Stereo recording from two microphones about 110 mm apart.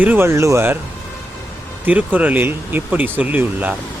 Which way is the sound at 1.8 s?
15° right (ahead or behind).